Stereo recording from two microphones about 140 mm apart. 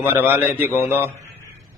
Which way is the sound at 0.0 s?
15° right (ahead or behind).